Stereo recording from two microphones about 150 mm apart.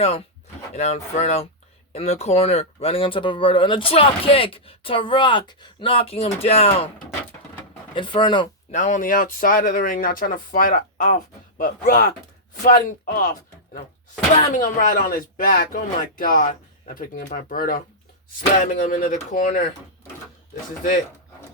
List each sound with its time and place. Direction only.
0.7 s speech: 45° left (ahead or behind)
7.9 s speech: 30° left (ahead or behind)
8.7 s speech: 55° left (ahead or behind)
14.5 s speech: 65° left (ahead or behind)